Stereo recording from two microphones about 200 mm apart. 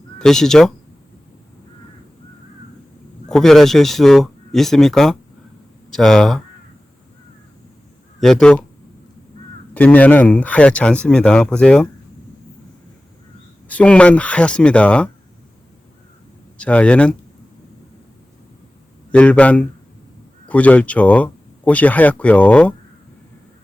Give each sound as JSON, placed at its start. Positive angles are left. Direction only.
{"t": 0.2, "sound": "speech", "side_deg": 0}
{"t": 3.2, "sound": "speech", "side_deg": 0}
{"t": 8.2, "sound": "speech", "side_deg": 5}
{"t": 9.7, "sound": "speech", "side_deg": 10}
{"t": 13.7, "sound": "speech", "side_deg": 5}
{"t": 16.6, "sound": "speech", "side_deg": 5}
{"t": 19.1, "sound": "speech", "side_deg": 5}